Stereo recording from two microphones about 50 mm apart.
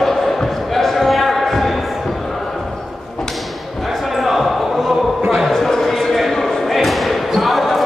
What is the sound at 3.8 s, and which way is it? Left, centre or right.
Basketball bounce, centre.